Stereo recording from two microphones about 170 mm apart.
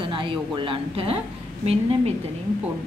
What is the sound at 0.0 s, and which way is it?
Speech, 30° right (ahead or behind).